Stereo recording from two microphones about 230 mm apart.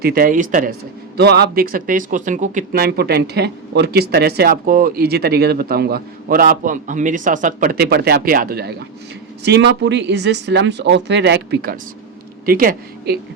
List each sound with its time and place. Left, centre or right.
0.0 s a man's voice: right